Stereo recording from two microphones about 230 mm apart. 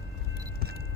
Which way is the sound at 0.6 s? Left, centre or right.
Right.